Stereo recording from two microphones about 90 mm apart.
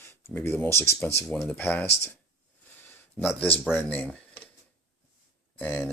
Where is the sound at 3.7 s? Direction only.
20° left (ahead or behind).